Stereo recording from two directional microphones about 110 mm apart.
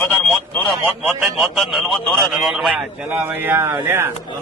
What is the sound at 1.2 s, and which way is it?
A man's voice, centre (ahead or behind).